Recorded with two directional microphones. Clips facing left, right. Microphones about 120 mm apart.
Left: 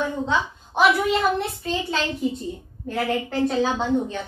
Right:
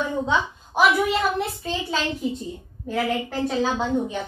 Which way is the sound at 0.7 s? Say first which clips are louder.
Left 1 dB; 5° right (ahead or behind).